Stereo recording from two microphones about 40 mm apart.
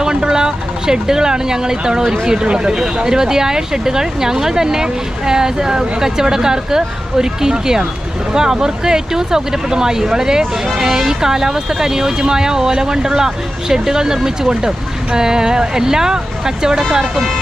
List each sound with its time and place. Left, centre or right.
0.0 s speech: centre